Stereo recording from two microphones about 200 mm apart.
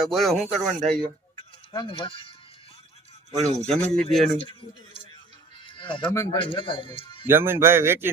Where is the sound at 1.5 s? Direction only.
25° left (ahead or behind).